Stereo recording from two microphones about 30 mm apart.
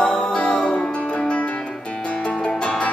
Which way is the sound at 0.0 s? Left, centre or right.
Left.